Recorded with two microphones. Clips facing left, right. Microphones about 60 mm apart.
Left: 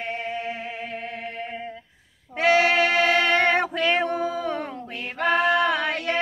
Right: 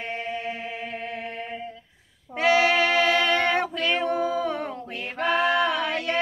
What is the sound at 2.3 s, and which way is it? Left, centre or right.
Music, left.